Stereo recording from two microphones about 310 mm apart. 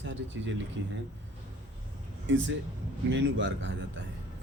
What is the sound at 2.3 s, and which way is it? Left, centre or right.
Speech, right.